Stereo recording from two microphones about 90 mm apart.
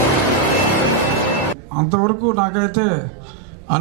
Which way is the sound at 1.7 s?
15° right (ahead or behind).